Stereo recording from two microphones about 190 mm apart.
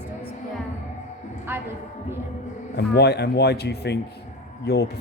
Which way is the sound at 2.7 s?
60° left (ahead or behind).